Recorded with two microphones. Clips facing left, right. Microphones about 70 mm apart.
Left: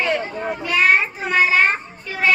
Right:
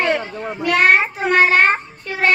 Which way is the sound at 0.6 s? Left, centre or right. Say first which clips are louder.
Right 3 dB; right.